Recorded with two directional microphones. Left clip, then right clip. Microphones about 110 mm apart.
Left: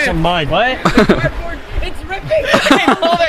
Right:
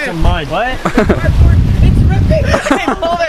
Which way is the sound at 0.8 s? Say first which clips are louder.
Left 1 dB; 10° left (ahead or behind).